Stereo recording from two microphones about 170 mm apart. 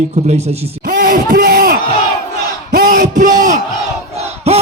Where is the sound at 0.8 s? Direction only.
65° right (ahead or behind).